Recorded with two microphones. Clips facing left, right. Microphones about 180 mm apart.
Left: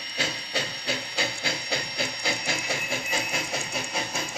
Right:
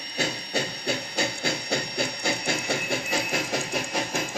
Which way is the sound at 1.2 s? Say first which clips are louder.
Right 3 dB; 55° right (ahead or behind).